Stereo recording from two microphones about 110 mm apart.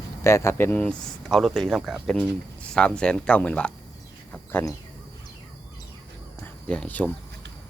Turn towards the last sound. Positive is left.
turn(degrees=15)  # may be behind; listen again after turning